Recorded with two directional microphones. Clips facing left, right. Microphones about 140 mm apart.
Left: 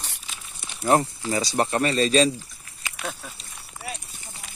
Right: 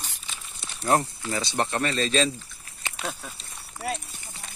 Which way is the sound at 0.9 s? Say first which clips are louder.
Left 3 dB; 20° left (ahead or behind).